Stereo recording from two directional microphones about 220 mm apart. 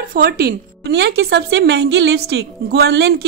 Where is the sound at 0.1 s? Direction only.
45° right (ahead or behind).